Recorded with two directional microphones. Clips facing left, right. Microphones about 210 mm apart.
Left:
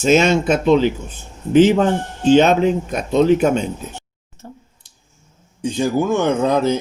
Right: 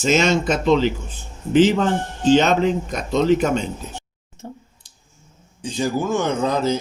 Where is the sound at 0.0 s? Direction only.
55° left (ahead or behind).